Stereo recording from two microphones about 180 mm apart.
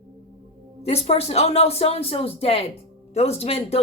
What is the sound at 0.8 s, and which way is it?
Speech, 35° left (ahead or behind).